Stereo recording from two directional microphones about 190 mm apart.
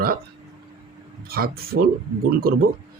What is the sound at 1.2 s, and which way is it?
Speech, 50° right (ahead or behind).